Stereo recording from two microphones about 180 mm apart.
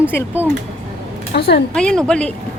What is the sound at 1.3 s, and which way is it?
Speech, 65° left (ahead or behind).